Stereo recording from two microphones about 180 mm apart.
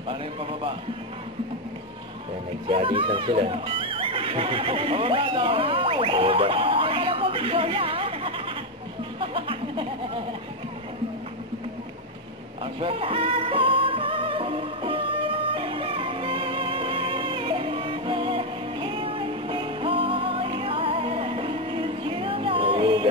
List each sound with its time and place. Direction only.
0.1 s a man's voice: 30° right (ahead or behind)
2.7 s speech: 30° right (ahead or behind)
9.2 s music: 30° right (ahead or behind)
12.8 s music: 30° right (ahead or behind)